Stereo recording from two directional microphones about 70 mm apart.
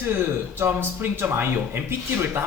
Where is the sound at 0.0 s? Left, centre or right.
Right.